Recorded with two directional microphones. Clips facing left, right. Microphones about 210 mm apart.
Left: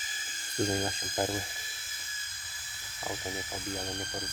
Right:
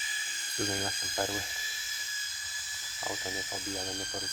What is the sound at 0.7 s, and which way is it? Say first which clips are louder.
Speech: left 4 dB; 25° left (ahead or behind).